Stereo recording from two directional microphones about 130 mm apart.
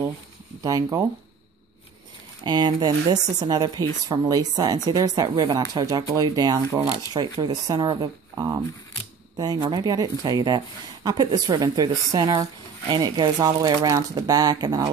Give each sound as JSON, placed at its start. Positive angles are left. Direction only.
{"t": 0.6, "sound": "speech", "side_deg": -30}
{"t": 2.4, "sound": "speech", "side_deg": -35}